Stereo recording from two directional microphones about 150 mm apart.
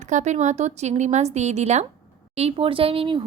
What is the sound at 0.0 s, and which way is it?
A woman's voice, 55° right (ahead or behind).